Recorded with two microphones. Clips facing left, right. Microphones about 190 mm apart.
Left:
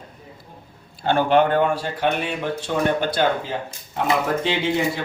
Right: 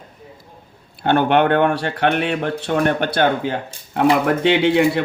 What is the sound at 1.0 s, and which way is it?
Speech, 60° right (ahead or behind).